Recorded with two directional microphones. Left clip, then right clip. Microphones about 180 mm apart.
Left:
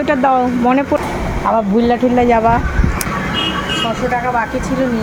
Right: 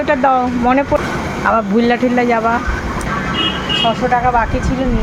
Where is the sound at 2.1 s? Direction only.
15° left (ahead or behind).